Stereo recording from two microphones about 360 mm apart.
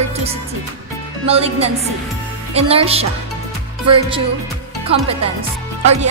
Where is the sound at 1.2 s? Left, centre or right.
Centre.